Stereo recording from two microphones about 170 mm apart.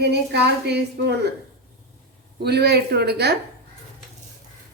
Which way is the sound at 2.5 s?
70° right (ahead or behind).